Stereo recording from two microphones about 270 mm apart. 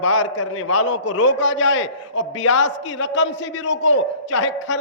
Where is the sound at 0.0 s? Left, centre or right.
Left.